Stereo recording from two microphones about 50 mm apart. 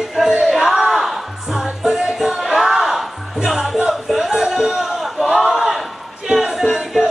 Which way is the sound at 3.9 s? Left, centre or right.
Centre.